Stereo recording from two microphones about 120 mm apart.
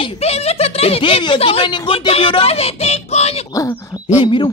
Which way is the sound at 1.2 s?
45° left (ahead or behind).